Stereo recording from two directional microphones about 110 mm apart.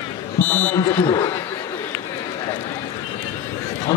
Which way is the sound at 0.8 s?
50° left (ahead or behind).